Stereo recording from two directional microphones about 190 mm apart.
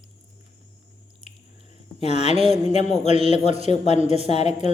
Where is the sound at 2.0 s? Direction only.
35° left (ahead or behind).